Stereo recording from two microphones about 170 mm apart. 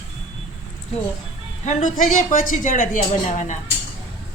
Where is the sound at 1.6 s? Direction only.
45° left (ahead or behind).